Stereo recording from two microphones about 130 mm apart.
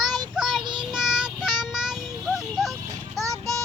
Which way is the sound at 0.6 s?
35° right (ahead or behind).